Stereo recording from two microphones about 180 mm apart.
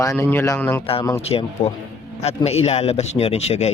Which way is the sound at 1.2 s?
35° left (ahead or behind).